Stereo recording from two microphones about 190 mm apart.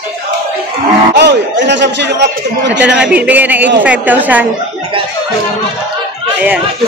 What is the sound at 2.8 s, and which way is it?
A man's voice, 5° right (ahead or behind).